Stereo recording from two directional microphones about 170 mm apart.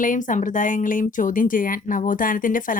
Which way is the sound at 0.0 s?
50° left (ahead or behind).